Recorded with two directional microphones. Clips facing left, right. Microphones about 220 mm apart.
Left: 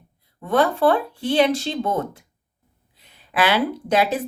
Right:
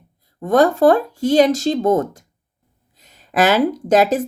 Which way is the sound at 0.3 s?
45° right (ahead or behind).